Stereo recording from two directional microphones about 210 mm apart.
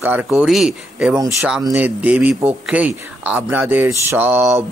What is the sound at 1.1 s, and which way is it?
Speech, 15° right (ahead or behind).